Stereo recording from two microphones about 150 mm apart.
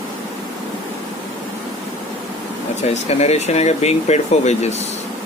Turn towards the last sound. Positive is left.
turn(degrees=50)  # may be behind; listen again after turning